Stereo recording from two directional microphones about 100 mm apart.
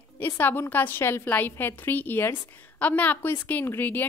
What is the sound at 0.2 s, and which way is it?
A woman's voice, 20° left (ahead or behind).